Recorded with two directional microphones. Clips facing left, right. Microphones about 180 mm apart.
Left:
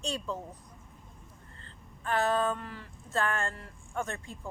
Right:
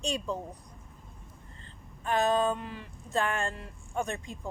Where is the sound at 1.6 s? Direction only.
15° right (ahead or behind).